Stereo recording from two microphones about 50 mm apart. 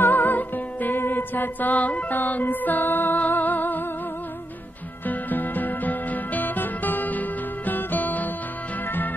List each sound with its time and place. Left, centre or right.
0.0 s music: left
5.0 s music: left